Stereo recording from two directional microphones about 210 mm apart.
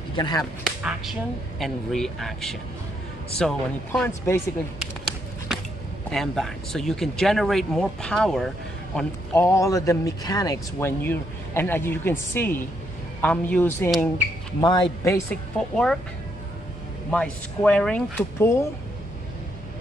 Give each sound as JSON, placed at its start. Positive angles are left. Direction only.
{"t": 0.1, "sound": "speech", "side_deg": 20}
{"t": 0.4, "sound": "speech", "side_deg": 0}
{"t": 6.0, "sound": "speech", "side_deg": 0}
{"t": 9.3, "sound": "a man's voice", "side_deg": 15}
{"t": 14.6, "sound": "a man's voice", "side_deg": 20}
{"t": 15.7, "sound": "speech", "side_deg": 5}
{"t": 17.1, "sound": "speech", "side_deg": 5}